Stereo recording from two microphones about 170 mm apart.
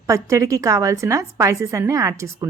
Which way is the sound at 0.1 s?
20° right (ahead or behind).